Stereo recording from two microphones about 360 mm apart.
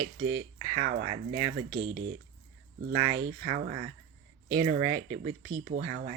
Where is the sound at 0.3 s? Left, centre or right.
Centre.